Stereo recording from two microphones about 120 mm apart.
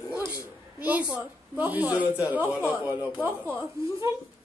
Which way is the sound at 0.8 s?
10° right (ahead or behind).